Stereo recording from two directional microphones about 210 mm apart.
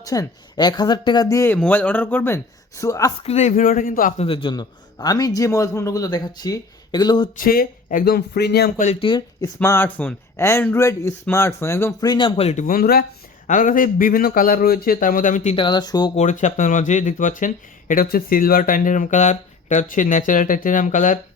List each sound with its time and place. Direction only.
0.0 s a man's voice: 15° left (ahead or behind)
3.2 s speech: 35° left (ahead or behind)
4.2 s a man's voice: 25° left (ahead or behind)
7.3 s speech: 45° left (ahead or behind)
8.9 s a man's voice: 25° left (ahead or behind)
9.6 s speech: 10° left (ahead or behind); by 15.5 s 35° left (ahead or behind)
15.5 s a man's voice: 20° left (ahead or behind)
16.1 s speech: 35° left (ahead or behind)